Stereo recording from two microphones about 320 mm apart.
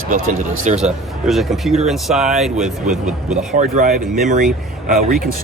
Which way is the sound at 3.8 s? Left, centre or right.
Right.